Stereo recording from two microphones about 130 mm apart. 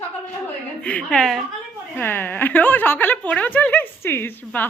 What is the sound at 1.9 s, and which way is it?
A woman's voice, 15° left (ahead or behind).